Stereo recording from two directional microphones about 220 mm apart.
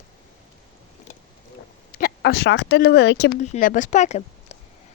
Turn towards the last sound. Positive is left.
turn(degrees=30)  # may be behind; listen again after turning